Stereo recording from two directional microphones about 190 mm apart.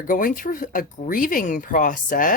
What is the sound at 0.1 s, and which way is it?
Speech, 45° left (ahead or behind).